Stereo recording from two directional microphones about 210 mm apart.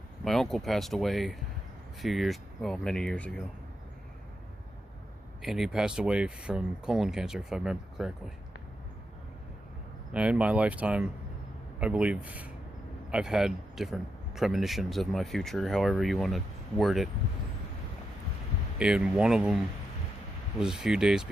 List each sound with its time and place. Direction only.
0.3 s speech: centre (ahead or behind)
5.4 s speech: centre (ahead or behind)
10.1 s speech: 5° right (ahead or behind)
18.8 s speech: 5° right (ahead or behind)
20.6 s speech: 5° right (ahead or behind)